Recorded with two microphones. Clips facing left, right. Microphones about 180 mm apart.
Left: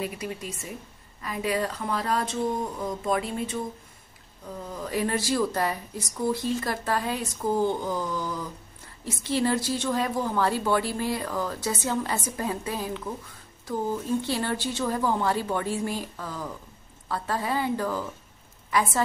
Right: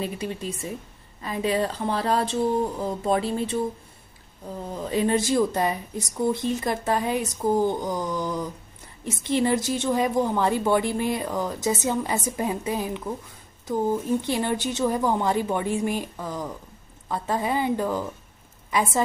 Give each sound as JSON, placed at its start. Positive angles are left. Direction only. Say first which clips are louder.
{"t": 0.0, "sound": "a woman's voice", "louder": "right 3 dB", "side_deg": -30}
{"t": 4.6, "sound": "a woman's voice", "louder": "right 3 dB", "side_deg": -25}
{"t": 7.4, "sound": "a sound", "louder": "right 2 dB", "side_deg": -15}
{"t": 9.0, "sound": "a woman's voice", "louder": "right 2 dB", "side_deg": -20}